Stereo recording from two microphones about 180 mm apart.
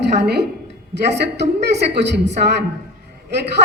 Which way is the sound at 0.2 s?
65° right (ahead or behind).